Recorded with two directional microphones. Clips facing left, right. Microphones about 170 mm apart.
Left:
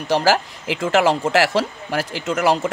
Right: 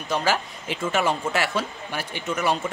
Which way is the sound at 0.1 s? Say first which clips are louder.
Left 6 dB; 80° left.